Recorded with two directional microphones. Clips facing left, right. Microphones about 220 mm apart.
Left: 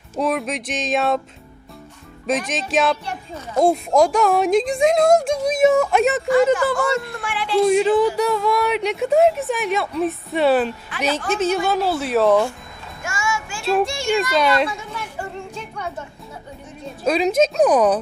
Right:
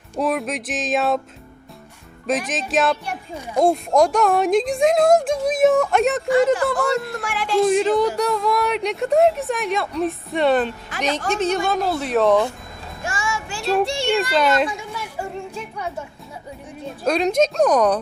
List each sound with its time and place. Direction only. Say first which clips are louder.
0.2 s speech: even; centre (ahead or behind)
2.2 s speech: even; centre (ahead or behind)
3.1 s speech: even; 10° right (ahead or behind)
3.6 s speech: left 1 dB; centre (ahead or behind)
7.2 s speech: even; 45° right (ahead or behind)
7.6 s speech: left 2 dB; centre (ahead or behind)
13.0 s music: left 1 dB; 35° right (ahead or behind)
13.8 s speech: even; 35° right (ahead or behind)
14.3 s speech: even; centre (ahead or behind)
14.7 s a sound: even; 10° right (ahead or behind)
16.8 s speech: left 1 dB; centre (ahead or behind)